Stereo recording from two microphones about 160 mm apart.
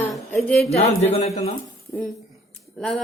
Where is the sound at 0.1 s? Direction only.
5° left (ahead or behind).